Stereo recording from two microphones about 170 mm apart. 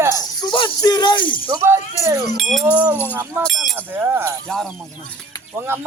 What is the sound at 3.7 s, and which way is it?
Speech, 10° right (ahead or behind).